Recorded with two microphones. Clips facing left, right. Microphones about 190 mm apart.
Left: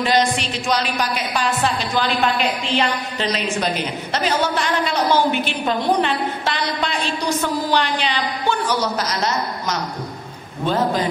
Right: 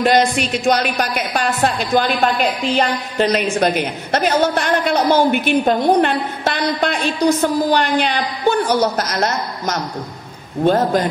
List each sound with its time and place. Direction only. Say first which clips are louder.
0.0 s speech: right 4 dB; 55° right (ahead or behind)